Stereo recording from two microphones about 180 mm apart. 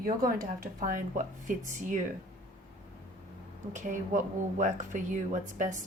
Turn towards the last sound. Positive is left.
turn(degrees=-45)  # may be behind; listen again after turning